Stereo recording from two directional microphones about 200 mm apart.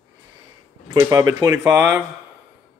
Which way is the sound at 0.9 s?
15° right (ahead or behind).